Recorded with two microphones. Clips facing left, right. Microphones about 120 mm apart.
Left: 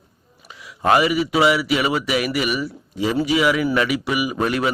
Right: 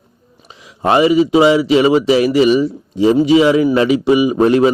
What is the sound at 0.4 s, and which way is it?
Speech, 25° right (ahead or behind).